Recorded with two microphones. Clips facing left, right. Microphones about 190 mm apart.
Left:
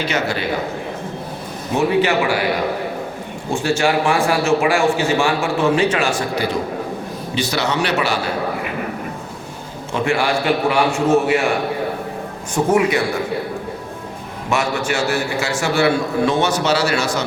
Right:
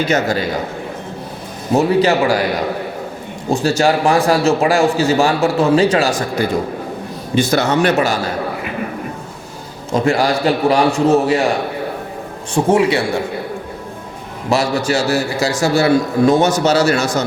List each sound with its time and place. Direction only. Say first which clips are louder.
0.1 s a man's voice: right 5 dB; 40° right (ahead or behind)
1.7 s a man's voice: right 3 dB; 40° right (ahead or behind)
3.5 s a man's voice: right 3 dB; 40° right (ahead or behind)
9.9 s a man's voice: right 4 dB; 40° right (ahead or behind)
12.6 s speech: right 3 dB; 25° right (ahead or behind)
14.5 s a man's voice: right 4 dB; 35° right (ahead or behind)